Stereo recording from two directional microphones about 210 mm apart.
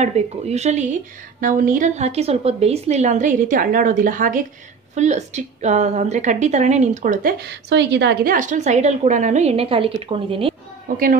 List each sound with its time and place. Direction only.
0.0 s a woman's voice: 30° right (ahead or behind)